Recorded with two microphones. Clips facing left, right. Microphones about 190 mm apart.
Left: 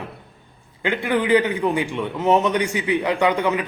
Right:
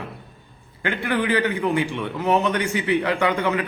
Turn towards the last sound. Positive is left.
turn(degrees=15)  # may be behind; listen again after turning